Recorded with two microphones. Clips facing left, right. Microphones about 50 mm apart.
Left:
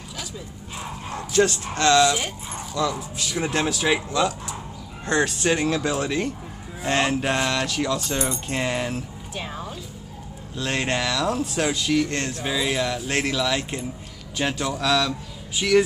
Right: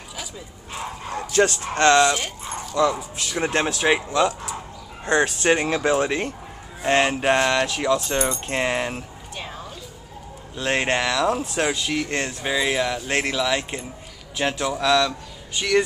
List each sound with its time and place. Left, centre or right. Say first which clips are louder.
1.3 s speech: right 1 dB; right; by 8.9 s centre
9.3 s a sound: left 2 dB; centre
10.5 s speech: right 3 dB; right
11.5 s speech: left 1 dB; centre